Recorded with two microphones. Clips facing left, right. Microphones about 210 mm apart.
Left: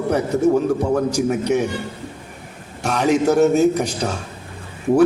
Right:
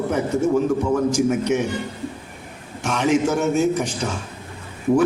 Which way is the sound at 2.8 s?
35° left (ahead or behind).